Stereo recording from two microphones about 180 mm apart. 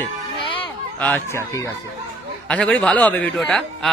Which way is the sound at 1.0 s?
10° left (ahead or behind).